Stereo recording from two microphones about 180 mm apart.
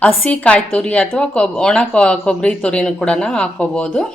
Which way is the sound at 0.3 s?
5° left (ahead or behind).